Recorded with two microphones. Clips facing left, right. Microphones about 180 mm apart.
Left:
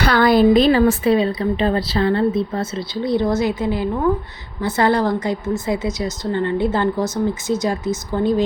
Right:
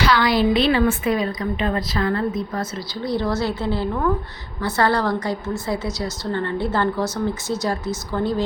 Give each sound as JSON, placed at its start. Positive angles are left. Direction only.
{"t": 0.0, "sound": "speech", "side_deg": 55}